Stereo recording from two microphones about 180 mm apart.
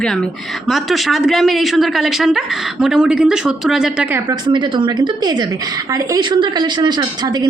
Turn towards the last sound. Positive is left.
turn(degrees=-25)  # may be behind; listen again after turning